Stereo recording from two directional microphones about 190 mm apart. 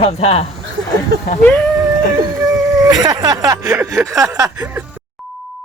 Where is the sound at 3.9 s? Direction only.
15° right (ahead or behind).